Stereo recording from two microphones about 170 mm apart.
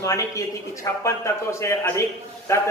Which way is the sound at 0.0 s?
20° left (ahead or behind).